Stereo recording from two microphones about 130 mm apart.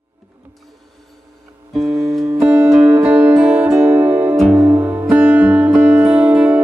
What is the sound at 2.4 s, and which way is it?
Music, 20° right (ahead or behind).